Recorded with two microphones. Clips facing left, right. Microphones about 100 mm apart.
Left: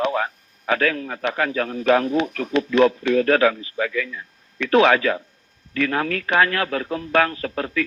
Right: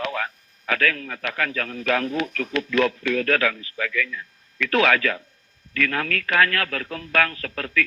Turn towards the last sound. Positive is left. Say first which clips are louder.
# left 3 dB
turn(degrees=25)  # may be behind; listen again after turning